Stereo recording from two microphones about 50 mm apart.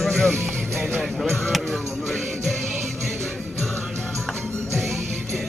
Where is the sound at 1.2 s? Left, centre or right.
Centre.